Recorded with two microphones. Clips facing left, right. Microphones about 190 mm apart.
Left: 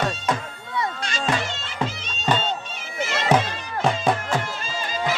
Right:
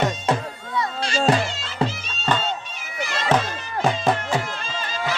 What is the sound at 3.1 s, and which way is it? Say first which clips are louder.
Bagpipes: left 1 dB; 15° left (ahead or behind).